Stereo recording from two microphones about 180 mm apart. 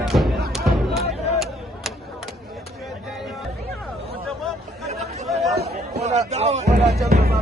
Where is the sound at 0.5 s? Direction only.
Centre (ahead or behind).